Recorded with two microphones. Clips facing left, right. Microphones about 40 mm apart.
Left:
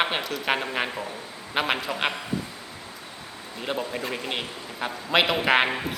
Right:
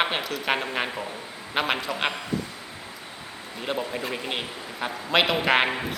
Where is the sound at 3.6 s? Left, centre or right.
Centre.